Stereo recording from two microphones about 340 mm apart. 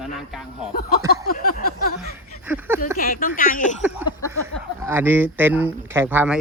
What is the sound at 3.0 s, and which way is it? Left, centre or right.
Speech, left.